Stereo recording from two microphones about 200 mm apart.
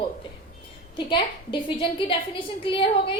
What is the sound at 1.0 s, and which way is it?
A woman's voice, 25° left (ahead or behind).